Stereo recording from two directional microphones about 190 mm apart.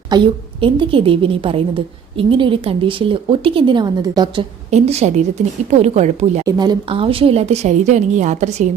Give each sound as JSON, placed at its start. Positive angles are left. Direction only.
{"t": 0.1, "sound": "a woman's voice", "side_deg": -20}
{"t": 4.7, "sound": "speech", "side_deg": -35}
{"t": 6.4, "sound": "speech", "side_deg": -20}